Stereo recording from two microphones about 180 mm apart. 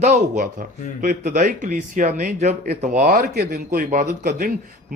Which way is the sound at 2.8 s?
40° right (ahead or behind).